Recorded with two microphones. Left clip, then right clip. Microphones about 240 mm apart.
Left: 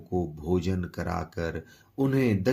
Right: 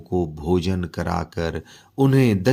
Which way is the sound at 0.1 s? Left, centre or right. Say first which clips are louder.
Right 6 dB; right.